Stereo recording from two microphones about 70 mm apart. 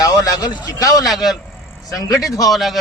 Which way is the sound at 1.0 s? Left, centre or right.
Centre.